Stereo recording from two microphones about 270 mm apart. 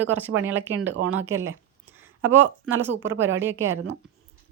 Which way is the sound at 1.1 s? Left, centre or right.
Centre.